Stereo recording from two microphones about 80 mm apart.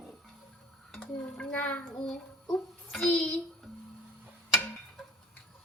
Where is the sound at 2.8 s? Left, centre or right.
Centre.